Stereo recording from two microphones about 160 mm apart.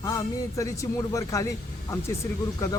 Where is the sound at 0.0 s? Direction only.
20° left (ahead or behind).